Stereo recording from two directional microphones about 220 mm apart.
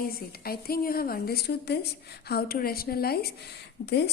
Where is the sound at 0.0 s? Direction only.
45° left (ahead or behind).